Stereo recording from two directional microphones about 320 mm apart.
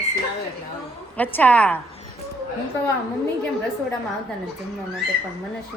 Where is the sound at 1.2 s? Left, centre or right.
Centre.